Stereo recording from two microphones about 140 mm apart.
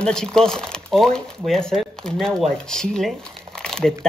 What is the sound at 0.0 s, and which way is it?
Speech, 5° left (ahead or behind).